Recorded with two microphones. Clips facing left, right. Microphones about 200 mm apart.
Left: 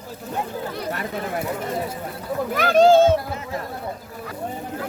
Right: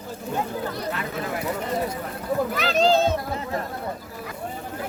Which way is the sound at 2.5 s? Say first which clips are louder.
Left 8 dB; 50° left (ahead or behind).